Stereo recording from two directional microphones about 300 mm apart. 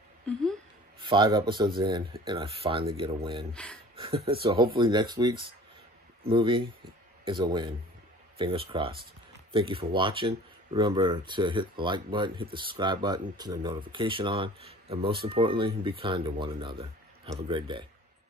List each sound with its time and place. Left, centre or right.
0.9 s speech: centre
3.5 s speech: centre
3.9 s a sound: centre
4.3 s speech: centre